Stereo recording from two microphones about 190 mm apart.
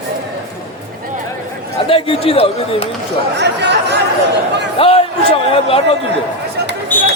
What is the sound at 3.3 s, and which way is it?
Speech, 65° right (ahead or behind).